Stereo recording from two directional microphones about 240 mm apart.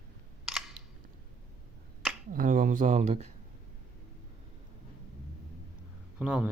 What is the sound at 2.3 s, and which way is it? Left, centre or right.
Speech, right.